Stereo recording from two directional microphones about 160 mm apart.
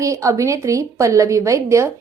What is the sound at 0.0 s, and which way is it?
A woman's voice, 20° right (ahead or behind).